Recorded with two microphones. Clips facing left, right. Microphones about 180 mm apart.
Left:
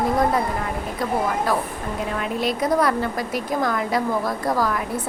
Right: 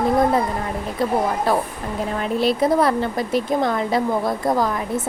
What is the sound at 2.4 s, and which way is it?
Speech, 30° right (ahead or behind).